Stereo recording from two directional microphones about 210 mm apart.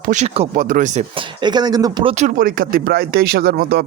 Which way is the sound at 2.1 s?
40° right (ahead or behind).